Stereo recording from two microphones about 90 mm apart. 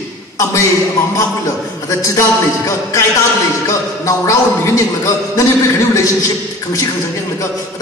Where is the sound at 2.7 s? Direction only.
35° left (ahead or behind).